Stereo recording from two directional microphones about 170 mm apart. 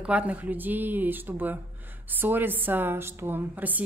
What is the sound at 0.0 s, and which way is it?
A woman's voice, 10° right (ahead or behind).